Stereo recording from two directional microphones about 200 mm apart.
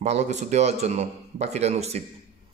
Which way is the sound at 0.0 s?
35° right (ahead or behind).